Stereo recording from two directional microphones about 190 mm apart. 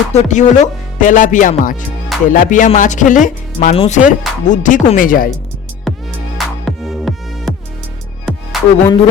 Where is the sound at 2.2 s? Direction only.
45° left (ahead or behind).